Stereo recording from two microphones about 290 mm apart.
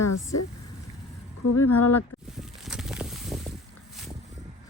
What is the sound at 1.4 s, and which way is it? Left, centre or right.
Speech, left.